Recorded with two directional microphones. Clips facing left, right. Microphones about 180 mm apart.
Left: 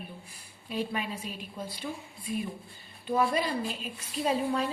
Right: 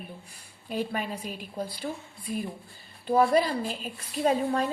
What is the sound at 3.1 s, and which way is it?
A woman's voice, 45° right (ahead or behind).